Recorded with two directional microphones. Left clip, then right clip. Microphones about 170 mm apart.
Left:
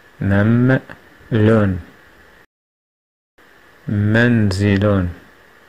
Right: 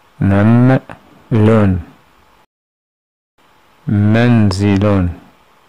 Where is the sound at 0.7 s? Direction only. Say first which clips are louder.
Right 3 dB; 20° right (ahead or behind).